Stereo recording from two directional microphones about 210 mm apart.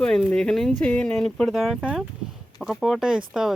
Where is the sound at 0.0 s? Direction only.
5° left (ahead or behind).